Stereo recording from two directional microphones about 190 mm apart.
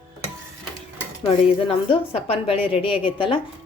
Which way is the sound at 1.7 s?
30° left (ahead or behind).